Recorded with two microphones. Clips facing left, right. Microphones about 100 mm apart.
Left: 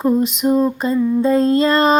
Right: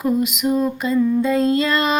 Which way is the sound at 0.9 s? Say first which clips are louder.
Right 2 dB; 15° left (ahead or behind).